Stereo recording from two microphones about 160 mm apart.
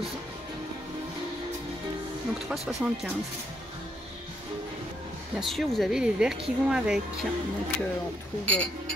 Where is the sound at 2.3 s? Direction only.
Centre (ahead or behind).